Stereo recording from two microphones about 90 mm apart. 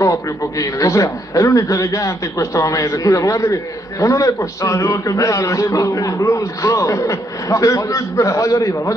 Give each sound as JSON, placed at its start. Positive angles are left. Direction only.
{"t": 0.0, "sound": "a man's voice", "side_deg": 35}